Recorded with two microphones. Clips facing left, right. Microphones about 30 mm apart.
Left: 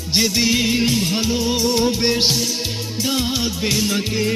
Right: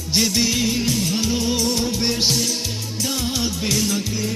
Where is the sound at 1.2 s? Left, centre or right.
Centre.